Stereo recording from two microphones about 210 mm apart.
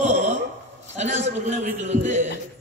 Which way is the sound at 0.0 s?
35° right (ahead or behind).